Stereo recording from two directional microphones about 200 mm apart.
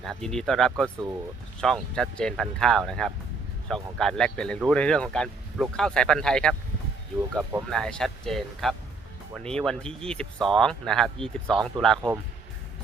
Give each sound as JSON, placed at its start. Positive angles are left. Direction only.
{"t": 0.0, "sound": "speech", "side_deg": 0}